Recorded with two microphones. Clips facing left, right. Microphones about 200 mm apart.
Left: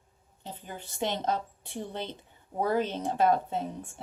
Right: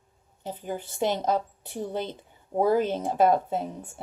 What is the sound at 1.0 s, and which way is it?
Speech, 50° right (ahead or behind).